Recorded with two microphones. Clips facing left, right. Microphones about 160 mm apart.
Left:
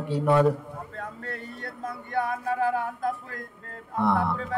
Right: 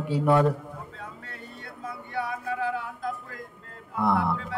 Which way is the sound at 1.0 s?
55° left (ahead or behind).